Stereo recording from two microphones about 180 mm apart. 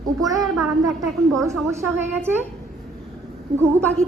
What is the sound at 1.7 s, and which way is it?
Speech, 15° right (ahead or behind).